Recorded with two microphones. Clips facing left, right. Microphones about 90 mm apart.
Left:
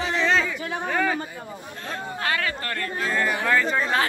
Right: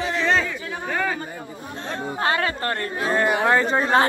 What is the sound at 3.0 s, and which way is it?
Speech, 20° right (ahead or behind).